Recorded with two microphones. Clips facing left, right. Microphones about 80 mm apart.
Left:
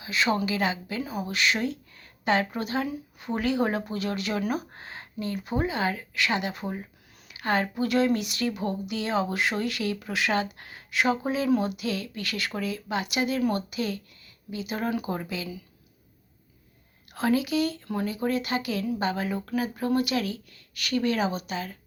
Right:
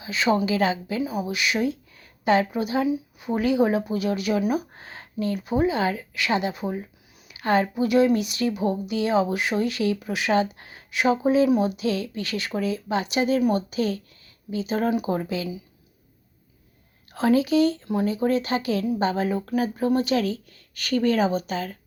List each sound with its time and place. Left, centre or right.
0.0 s speech: right
1.0 s speech: centre
5.8 s speech: left
6.1 s speech: right
17.1 s speech: right